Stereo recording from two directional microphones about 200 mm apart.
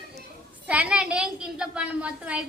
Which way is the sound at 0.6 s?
5° right (ahead or behind).